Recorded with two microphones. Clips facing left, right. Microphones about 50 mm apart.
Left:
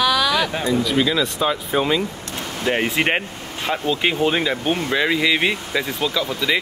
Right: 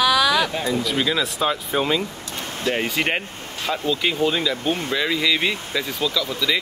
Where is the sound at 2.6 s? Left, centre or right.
Left.